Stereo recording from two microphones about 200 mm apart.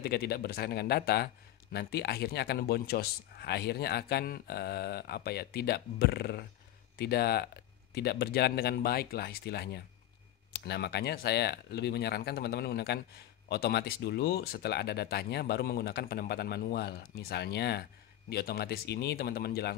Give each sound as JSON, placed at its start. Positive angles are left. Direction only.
{"t": 0.0, "sound": "speech", "side_deg": 50}